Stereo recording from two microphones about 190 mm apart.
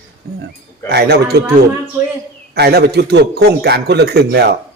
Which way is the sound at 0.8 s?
60° right (ahead or behind).